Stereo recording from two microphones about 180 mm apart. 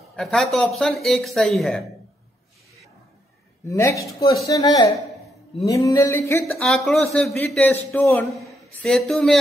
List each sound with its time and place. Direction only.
0.1 s speech: 5° left (ahead or behind)
3.6 s a man's voice: 15° left (ahead or behind)
6.6 s a man's voice: centre (ahead or behind)